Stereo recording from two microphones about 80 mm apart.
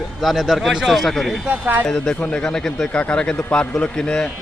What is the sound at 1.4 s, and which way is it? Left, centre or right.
Speech, right.